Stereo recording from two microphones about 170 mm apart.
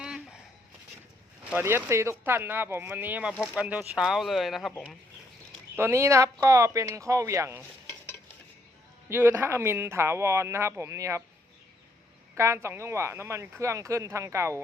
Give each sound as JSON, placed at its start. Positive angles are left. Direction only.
{"t": 0.0, "sound": "a sound", "side_deg": -5}
{"t": 1.5, "sound": "speech", "side_deg": -15}
{"t": 5.7, "sound": "speech", "side_deg": -15}
{"t": 9.0, "sound": "speech", "side_deg": -10}
{"t": 12.4, "sound": "speech", "side_deg": -15}